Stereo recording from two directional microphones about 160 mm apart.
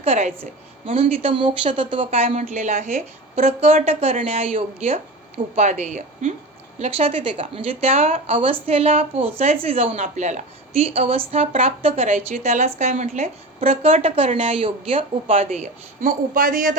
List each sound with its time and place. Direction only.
0.0 s a woman's voice: 40° right (ahead or behind); by 16.7 s 60° right (ahead or behind)